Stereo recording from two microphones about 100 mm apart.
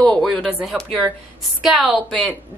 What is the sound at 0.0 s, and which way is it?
A woman's voice, 10° left (ahead or behind).